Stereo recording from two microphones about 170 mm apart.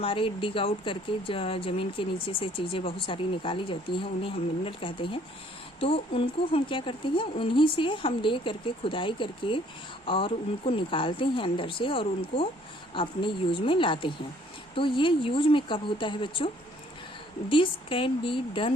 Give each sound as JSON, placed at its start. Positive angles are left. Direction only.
{"t": 0.0, "sound": "speech", "side_deg": 30}
{"t": 17.5, "sound": "speech", "side_deg": 30}